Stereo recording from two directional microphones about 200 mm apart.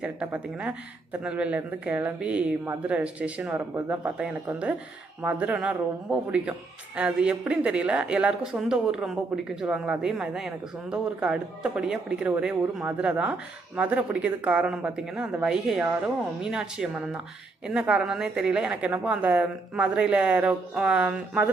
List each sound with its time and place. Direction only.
0.0 s speech: 5° right (ahead or behind)